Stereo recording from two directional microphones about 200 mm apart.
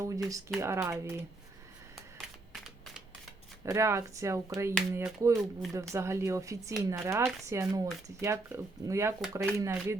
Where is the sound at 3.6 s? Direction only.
15° right (ahead or behind).